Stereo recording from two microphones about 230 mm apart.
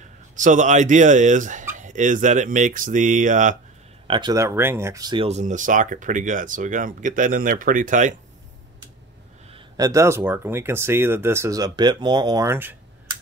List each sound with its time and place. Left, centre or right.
0.4 s speech: right
4.1 s speech: centre; by 8.1 s right
9.5 s speech: centre